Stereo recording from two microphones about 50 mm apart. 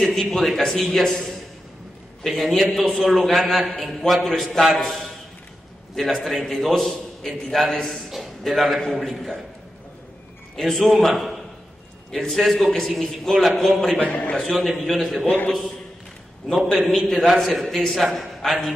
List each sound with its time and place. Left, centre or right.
0.0 s a man's voice: centre
2.2 s a man's voice: centre
10.5 s a man's voice: centre
13.9 s a man's voice: left
14.4 s a man's voice: centre
15.2 s a man's voice: left
16.7 s a man's voice: centre